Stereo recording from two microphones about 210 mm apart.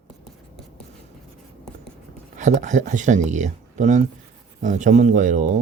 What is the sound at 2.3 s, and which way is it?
Speech, 35° right (ahead or behind).